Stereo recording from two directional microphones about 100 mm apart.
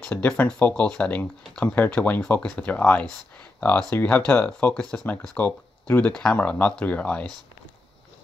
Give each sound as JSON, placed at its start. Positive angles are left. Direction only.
{"t": 0.0, "sound": "speech", "side_deg": 10}